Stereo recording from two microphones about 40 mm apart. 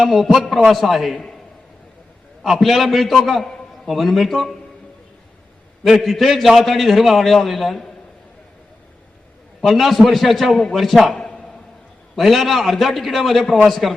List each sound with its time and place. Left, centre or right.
0.1 s a man's voice: centre
2.4 s a man's voice: centre
6.0 s a man's voice: centre
9.6 s a man's voice: centre
11.2 s a sound: centre
12.1 s a man's voice: centre